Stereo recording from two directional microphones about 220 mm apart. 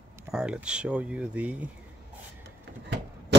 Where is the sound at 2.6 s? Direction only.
50° right (ahead or behind).